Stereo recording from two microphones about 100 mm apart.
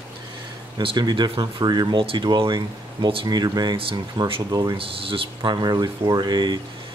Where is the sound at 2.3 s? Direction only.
50° right (ahead or behind).